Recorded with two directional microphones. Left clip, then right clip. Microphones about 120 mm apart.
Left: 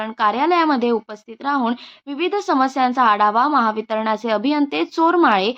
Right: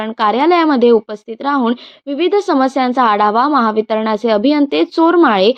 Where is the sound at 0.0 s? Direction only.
45° right (ahead or behind).